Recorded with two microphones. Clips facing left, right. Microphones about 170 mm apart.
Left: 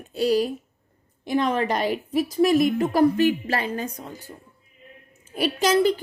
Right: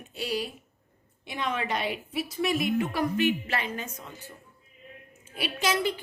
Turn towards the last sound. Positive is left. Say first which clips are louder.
# left 8 dB
turn(degrees=40)  # may be behind; listen again after turning